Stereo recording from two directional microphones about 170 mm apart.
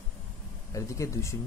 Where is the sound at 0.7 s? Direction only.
20° left (ahead or behind).